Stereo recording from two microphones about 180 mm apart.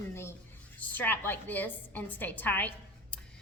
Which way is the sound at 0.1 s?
15° left (ahead or behind).